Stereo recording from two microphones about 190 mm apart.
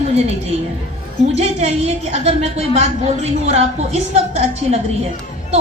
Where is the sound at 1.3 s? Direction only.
35° right (ahead or behind).